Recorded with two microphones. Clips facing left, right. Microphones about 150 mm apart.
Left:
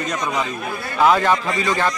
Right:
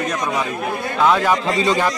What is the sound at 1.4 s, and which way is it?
Speech, 25° right (ahead or behind).